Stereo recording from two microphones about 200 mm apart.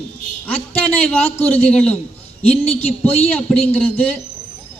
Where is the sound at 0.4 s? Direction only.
10° left (ahead or behind).